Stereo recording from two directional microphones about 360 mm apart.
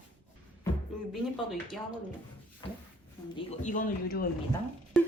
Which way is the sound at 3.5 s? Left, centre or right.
Left.